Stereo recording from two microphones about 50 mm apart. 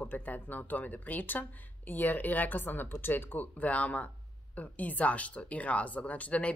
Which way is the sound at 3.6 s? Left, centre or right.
Left.